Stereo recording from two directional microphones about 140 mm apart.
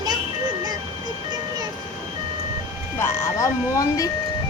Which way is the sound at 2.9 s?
20° left (ahead or behind).